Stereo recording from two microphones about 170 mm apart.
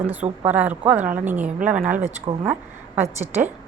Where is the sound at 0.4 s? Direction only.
10° right (ahead or behind).